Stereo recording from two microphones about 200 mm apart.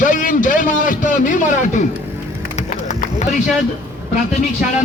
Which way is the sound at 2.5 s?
35° left (ahead or behind).